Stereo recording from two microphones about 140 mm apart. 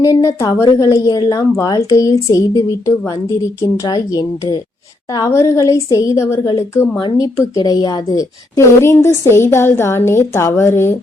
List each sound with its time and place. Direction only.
0.0 s a woman's voice: 25° left (ahead or behind)